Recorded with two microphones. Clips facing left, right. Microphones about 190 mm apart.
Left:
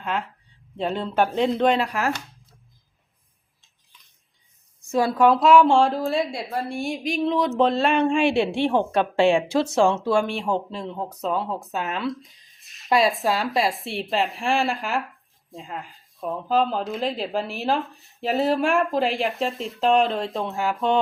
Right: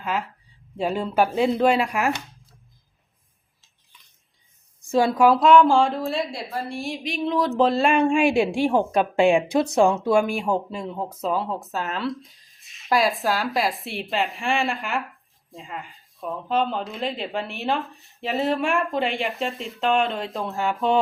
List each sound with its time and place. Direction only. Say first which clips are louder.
0.0 s speech: right 1 dB; centre (ahead or behind)
2.1 s chopping: right 1 dB; centre (ahead or behind)
3.6 s a sound: right 1 dB; centre (ahead or behind)
4.8 s a sound: right 2 dB; 30° right (ahead or behind)
5.0 s speech: even; centre (ahead or behind)
9.1 s speech: right 1 dB; 15° right (ahead or behind)
10.2 s speech: right 1 dB; centre (ahead or behind)